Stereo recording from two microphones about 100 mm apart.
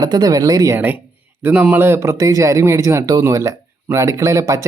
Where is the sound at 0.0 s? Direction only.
40° right (ahead or behind).